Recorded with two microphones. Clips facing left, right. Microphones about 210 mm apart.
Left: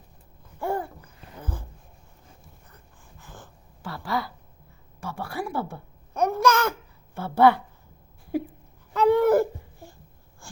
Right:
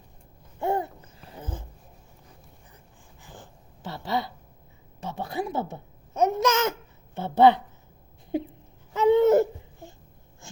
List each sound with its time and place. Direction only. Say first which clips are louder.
0.6 s babbling: right 2 dB; 25° right (ahead or behind)
2.7 s a sound: even; 15° right (ahead or behind)
4.9 s a child's voice: right 1 dB; 20° right (ahead or behind)
8.9 s babbling: right 1 dB; 20° right (ahead or behind)